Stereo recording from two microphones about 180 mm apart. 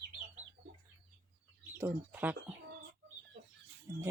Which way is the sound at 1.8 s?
10° right (ahead or behind).